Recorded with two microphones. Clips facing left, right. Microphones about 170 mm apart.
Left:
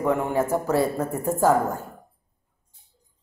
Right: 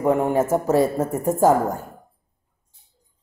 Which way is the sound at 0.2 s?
15° right (ahead or behind).